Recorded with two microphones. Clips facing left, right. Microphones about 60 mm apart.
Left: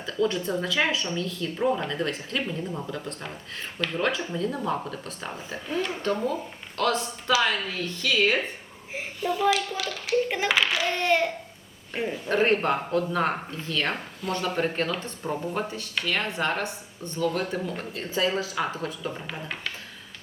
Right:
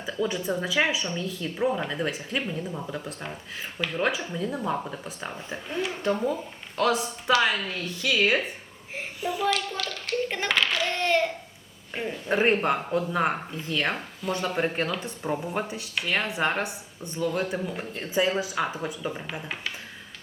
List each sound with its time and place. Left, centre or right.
0.0 s speech: centre
9.4 s a child's voice: centre
12.3 s speech: centre